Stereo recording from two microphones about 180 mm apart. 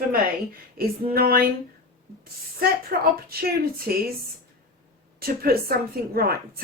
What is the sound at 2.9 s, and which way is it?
A woman's voice, 55° right (ahead or behind).